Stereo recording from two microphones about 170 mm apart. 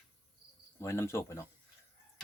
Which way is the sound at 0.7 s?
15° left (ahead or behind).